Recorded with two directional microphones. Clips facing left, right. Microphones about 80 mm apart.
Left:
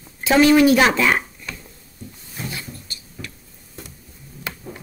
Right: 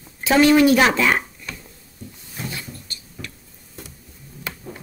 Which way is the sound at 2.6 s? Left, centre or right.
Centre.